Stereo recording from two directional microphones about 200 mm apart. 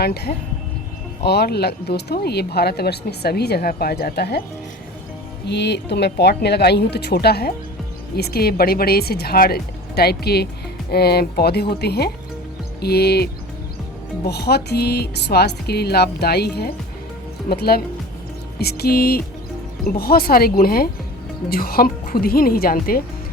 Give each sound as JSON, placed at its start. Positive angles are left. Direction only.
{"t": 0.0, "sound": "speech", "side_deg": 50}
{"t": 5.5, "sound": "speech", "side_deg": 55}